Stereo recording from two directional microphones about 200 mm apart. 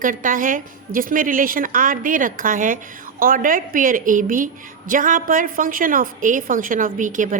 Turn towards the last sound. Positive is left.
turn(degrees=-40)  # may be behind; listen again after turning